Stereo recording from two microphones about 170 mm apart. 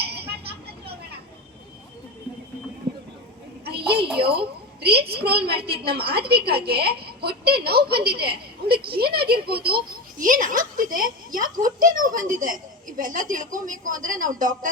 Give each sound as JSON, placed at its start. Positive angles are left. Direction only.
{"t": 0.0, "sound": "vehicle", "side_deg": -70}
{"t": 2.9, "sound": "a sound", "side_deg": -80}
{"t": 4.3, "sound": "a woman's voice", "side_deg": -70}